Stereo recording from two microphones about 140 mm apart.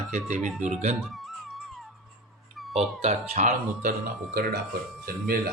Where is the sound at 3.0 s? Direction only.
55° right (ahead or behind).